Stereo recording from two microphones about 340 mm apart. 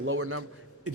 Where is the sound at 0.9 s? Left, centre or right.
Right.